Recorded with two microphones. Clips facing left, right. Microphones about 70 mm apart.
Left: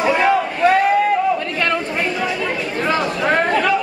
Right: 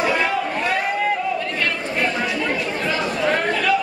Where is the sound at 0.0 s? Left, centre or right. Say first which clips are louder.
Left 4 dB; left.